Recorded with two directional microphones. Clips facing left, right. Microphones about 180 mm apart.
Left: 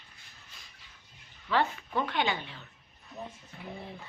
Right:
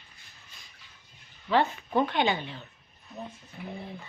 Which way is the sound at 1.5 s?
20° right (ahead or behind).